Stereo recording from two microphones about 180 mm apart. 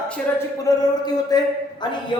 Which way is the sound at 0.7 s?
20° left (ahead or behind).